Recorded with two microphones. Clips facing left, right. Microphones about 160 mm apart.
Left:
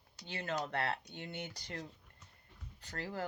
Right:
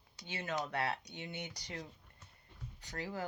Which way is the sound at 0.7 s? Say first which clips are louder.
Even; 55° left (ahead or behind).